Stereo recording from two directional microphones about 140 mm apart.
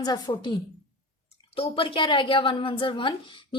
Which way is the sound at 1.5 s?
40° left (ahead or behind).